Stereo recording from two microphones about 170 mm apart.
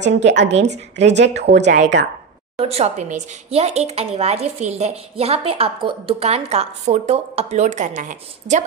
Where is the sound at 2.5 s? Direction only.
35° right (ahead or behind).